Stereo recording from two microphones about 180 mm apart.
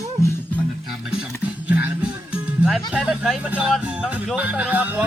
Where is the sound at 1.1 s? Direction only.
5° right (ahead or behind).